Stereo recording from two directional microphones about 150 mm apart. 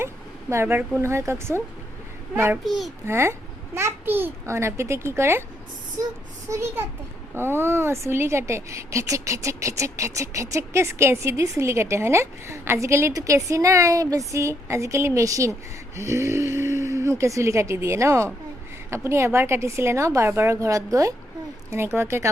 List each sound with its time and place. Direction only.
0.5 s a woman's voice: 15° right (ahead or behind)
2.6 s a child's voice: centre (ahead or behind)
3.1 s a woman's voice: 15° right (ahead or behind)
6.5 s a woman's voice: 20° right (ahead or behind)